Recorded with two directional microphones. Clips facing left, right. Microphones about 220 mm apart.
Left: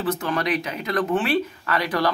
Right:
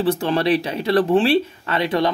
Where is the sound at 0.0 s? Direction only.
30° right (ahead or behind).